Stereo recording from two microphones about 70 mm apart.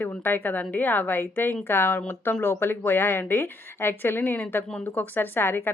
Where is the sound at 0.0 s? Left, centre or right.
Left.